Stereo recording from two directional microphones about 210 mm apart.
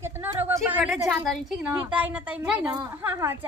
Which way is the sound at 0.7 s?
5° right (ahead or behind).